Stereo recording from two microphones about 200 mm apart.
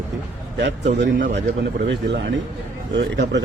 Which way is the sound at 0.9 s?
60° right (ahead or behind).